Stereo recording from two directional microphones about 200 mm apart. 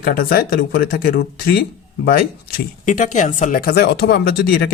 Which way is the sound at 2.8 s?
40° left (ahead or behind).